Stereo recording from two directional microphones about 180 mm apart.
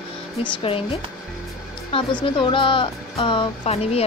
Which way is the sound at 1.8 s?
30° left (ahead or behind).